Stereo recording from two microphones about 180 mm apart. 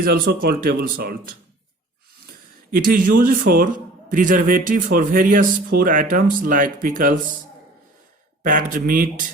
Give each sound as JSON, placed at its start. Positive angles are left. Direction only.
{"t": 0.0, "sound": "speech", "side_deg": -55}
{"t": 2.7, "sound": "speech", "side_deg": -50}
{"t": 8.4, "sound": "speech", "side_deg": -50}